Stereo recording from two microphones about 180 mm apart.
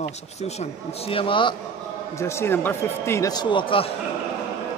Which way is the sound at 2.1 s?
15° left (ahead or behind).